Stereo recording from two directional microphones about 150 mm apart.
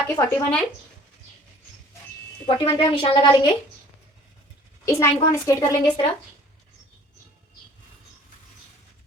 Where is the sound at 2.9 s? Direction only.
35° left (ahead or behind).